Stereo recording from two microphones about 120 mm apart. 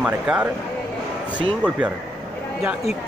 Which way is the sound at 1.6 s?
10° right (ahead or behind).